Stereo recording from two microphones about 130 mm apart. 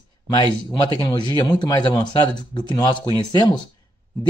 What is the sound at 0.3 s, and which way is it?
Speech, 35° left (ahead or behind).